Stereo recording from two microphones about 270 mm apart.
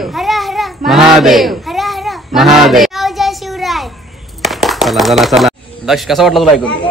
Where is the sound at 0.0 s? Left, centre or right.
Centre.